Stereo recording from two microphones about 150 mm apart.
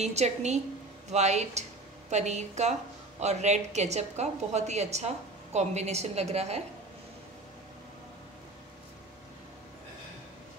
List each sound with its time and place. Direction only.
0.0 s a woman's voice: 45° right (ahead or behind)